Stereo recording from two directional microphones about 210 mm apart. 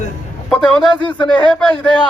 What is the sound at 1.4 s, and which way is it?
Speech, 5° left (ahead or behind).